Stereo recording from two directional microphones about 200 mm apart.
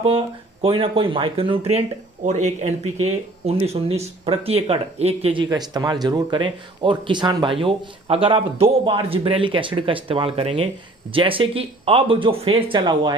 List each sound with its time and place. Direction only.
0.0 s speech: 30° right (ahead or behind)